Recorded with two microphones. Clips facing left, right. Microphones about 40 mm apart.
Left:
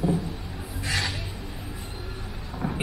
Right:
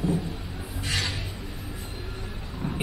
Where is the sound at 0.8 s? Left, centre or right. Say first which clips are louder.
Left 1 dB; centre.